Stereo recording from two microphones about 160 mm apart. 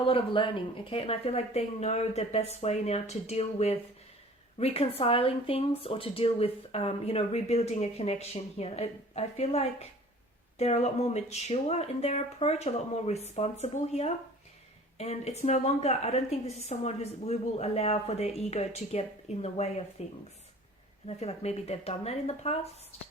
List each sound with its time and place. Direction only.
0.0 s a woman's voice: 35° left (ahead or behind)
21.1 s speech: 40° left (ahead or behind)